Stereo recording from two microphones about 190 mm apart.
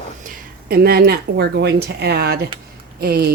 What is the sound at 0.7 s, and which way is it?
A woman's voice, 55° right (ahead or behind).